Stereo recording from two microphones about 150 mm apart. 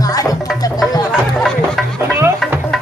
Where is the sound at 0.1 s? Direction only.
25° left (ahead or behind).